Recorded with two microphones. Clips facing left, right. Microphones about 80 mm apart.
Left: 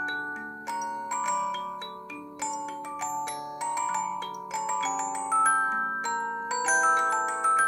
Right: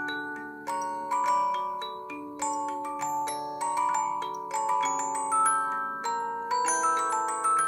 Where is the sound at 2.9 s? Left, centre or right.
Centre.